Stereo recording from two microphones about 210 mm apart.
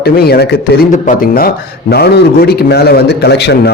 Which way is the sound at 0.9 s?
40° left (ahead or behind).